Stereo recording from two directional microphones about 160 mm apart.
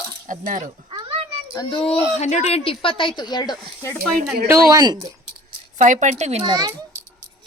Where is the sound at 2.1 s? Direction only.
45° left (ahead or behind); by 3.5 s 25° left (ahead or behind).